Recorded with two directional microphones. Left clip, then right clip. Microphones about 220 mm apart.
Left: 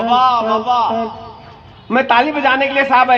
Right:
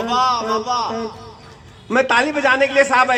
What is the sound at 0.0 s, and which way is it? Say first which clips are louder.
A man's voice: left 5 dB; 30° left (ahead or behind).